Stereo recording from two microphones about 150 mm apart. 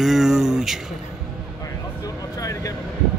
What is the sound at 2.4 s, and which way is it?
Vehicle, 25° left (ahead or behind).